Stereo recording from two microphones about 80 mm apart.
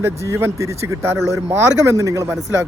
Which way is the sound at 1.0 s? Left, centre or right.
Right.